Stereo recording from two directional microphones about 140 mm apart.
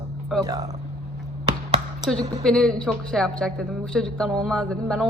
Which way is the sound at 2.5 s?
5° left (ahead or behind).